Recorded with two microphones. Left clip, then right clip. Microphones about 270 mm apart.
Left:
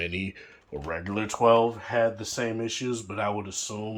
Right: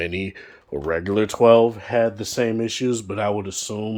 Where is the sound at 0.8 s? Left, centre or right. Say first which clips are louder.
Right 10 dB; right.